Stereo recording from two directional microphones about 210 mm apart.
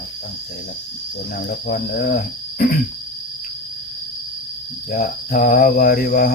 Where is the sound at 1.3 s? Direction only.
45° left (ahead or behind).